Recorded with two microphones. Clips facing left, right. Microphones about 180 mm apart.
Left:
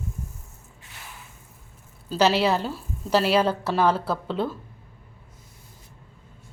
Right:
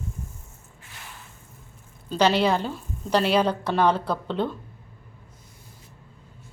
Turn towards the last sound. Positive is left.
turn(degrees=5)  # may be behind; listen again after turning